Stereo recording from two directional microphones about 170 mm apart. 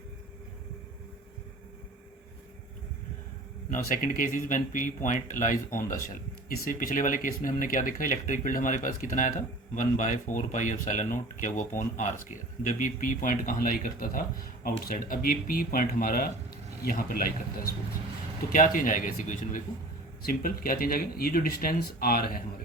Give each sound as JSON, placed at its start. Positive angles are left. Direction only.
{"t": 3.7, "sound": "speech", "side_deg": 55}